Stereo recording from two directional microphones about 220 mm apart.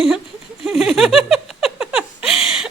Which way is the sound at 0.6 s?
Centre (ahead or behind).